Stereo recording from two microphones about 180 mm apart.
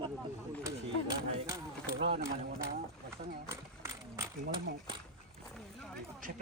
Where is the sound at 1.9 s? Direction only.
75° right (ahead or behind).